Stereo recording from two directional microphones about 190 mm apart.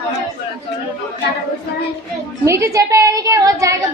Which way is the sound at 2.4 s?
15° right (ahead or behind).